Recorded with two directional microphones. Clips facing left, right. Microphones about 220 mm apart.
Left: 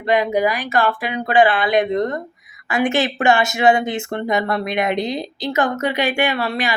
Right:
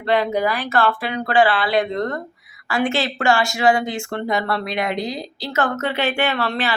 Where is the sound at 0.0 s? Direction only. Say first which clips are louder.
Left 2 dB; 15° left (ahead or behind).